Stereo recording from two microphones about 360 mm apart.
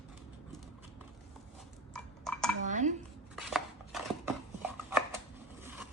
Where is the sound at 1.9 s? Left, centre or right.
Centre.